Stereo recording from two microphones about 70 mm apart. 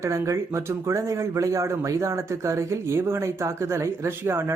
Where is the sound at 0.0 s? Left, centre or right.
Right.